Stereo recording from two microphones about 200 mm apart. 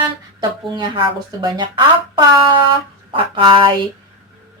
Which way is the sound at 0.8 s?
25° right (ahead or behind).